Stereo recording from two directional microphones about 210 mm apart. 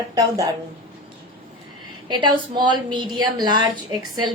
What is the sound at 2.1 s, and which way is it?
A woman's voice, 20° right (ahead or behind).